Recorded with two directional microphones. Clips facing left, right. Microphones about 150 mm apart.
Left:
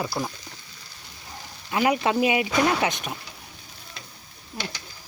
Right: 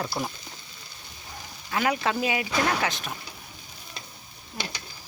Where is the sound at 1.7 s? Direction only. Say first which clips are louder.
Left 4 dB; 20° left (ahead or behind).